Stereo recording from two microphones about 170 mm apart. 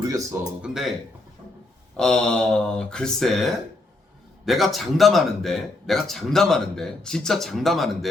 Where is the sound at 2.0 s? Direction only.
5° left (ahead or behind).